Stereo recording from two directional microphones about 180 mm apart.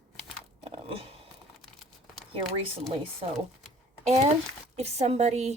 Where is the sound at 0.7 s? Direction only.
30° right (ahead or behind).